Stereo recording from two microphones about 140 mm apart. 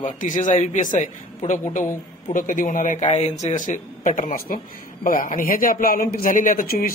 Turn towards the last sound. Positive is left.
turn(degrees=90)